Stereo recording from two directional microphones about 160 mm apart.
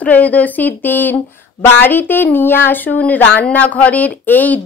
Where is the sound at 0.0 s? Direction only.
10° left (ahead or behind).